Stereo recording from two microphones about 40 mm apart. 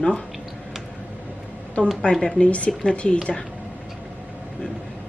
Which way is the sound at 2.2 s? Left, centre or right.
Left.